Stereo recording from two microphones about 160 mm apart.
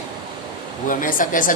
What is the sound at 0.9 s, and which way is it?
Speech, 55° left (ahead or behind).